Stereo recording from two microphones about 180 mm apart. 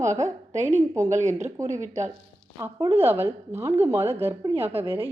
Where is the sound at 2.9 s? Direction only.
15° right (ahead or behind).